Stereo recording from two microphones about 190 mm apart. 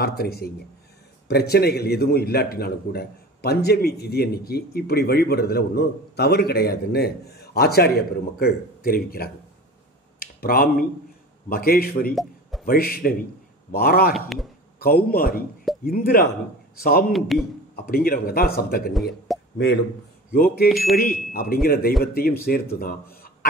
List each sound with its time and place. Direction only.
0.0 s a man's voice: 55° left (ahead or behind)
10.1 s a sound: 50° left (ahead or behind)
11.4 s speech: 50° left (ahead or behind)
12.2 s a sound: centre (ahead or behind)
12.6 s speech: 50° left (ahead or behind)
14.1 s speech: centre (ahead or behind)
14.8 s speech: 50° left (ahead or behind)
17.1 s speech: centre (ahead or behind)
17.7 s speech: 50° left (ahead or behind)
19.3 s a sound: centre (ahead or behind)
20.3 s speech: 50° left (ahead or behind)
20.6 s speech: centre (ahead or behind)
20.9 s speech: 50° left (ahead or behind)